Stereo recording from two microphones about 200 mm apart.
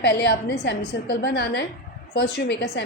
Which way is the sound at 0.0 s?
55° left (ahead or behind).